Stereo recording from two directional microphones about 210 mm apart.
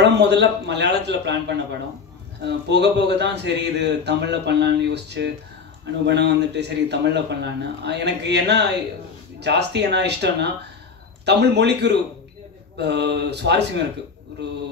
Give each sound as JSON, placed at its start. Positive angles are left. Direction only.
{"t": 0.0, "sound": "speech", "side_deg": -55}